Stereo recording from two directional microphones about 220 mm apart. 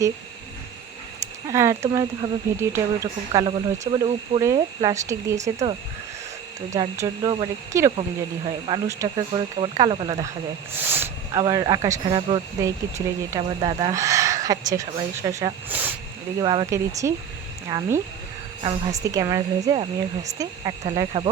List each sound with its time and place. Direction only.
1.2 s speech: 15° right (ahead or behind)
5.4 s speech: 30° right (ahead or behind)
6.7 s speech: 15° right (ahead or behind)
10.8 s speech: 10° right (ahead or behind)
16.4 s speech: 20° right (ahead or behind)